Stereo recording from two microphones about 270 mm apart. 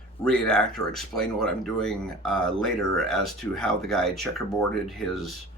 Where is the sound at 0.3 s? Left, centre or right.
Centre.